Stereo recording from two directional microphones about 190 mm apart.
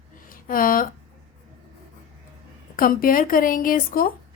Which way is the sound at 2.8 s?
50° left (ahead or behind).